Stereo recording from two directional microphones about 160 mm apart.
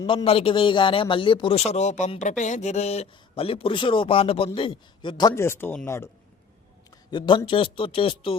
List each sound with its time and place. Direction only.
0.0 s a man's voice: 25° left (ahead or behind)
0.3 s speech: 35° left (ahead or behind)
5.3 s speech: 15° left (ahead or behind)
7.1 s speech: 30° left (ahead or behind)